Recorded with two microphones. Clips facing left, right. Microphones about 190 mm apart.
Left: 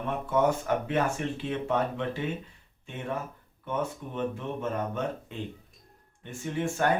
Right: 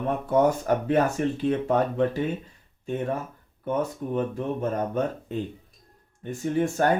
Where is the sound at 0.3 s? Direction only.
40° right (ahead or behind).